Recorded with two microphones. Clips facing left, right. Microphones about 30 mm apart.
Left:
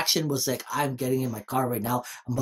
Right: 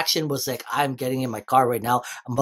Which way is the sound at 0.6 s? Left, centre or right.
Right.